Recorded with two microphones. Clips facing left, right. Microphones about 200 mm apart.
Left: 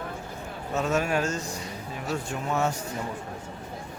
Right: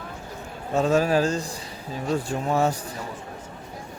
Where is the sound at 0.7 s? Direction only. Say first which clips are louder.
Right 6 dB; 30° right (ahead or behind).